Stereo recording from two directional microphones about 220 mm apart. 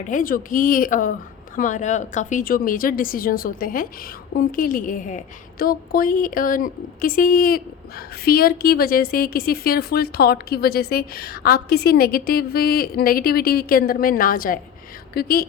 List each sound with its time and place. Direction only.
0.1 s a woman's voice: 40° left (ahead or behind)